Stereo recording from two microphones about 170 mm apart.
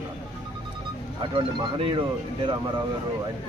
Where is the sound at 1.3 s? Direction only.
30° right (ahead or behind).